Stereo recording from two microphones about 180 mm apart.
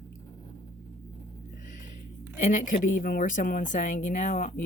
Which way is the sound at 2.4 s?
45° left (ahead or behind).